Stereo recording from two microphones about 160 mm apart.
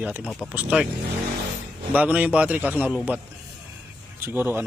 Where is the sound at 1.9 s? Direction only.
10° right (ahead or behind).